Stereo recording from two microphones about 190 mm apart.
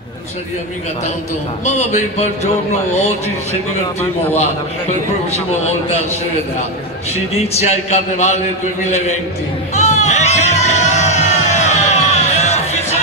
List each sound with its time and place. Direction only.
1.6 s speech: 35° left (ahead or behind)
7.3 s speech: 35° left (ahead or behind)
9.8 s music: 35° left (ahead or behind)